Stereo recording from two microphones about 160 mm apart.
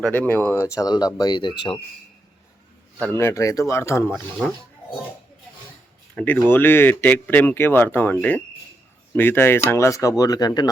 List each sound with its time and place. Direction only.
0.0 s speech: 10° left (ahead or behind); by 1.5 s 30° left (ahead or behind)
3.0 s speech: 15° left (ahead or behind)
4.4 s speech: centre (ahead or behind)
6.1 s speech: 10° left (ahead or behind); by 10.7 s 25° left (ahead or behind)